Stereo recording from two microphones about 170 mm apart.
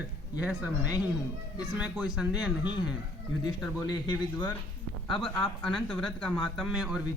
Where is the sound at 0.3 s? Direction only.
10° right (ahead or behind).